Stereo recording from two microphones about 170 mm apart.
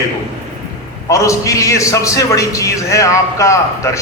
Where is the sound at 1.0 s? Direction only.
20° left (ahead or behind).